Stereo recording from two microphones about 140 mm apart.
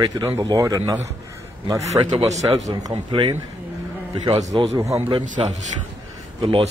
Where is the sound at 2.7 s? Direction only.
35° right (ahead or behind).